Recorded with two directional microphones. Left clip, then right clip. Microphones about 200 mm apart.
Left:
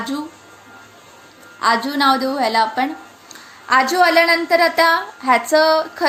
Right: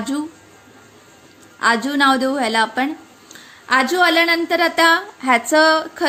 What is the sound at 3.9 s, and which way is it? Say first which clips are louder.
A woman's voice: left 1 dB; 25° right (ahead or behind).